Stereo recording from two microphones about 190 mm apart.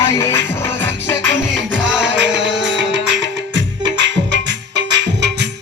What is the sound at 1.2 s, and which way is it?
Music, 75° right (ahead or behind).